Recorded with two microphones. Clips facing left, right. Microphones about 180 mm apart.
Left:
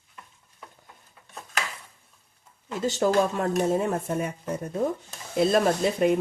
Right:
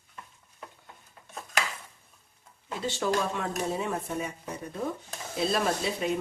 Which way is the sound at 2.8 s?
45° left (ahead or behind).